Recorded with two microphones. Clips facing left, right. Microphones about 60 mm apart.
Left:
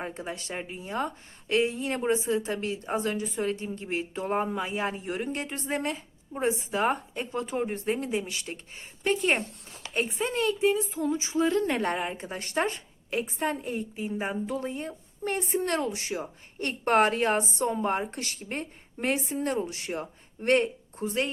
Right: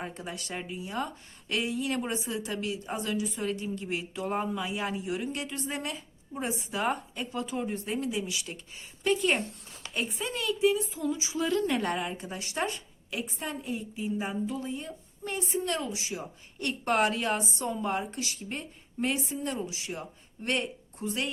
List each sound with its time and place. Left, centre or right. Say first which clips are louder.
0.0 s a woman's voice: left 3 dB; left
16.6 s a woman's voice: left 4 dB; left